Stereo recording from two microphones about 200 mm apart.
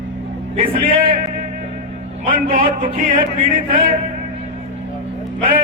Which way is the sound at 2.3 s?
45° right (ahead or behind).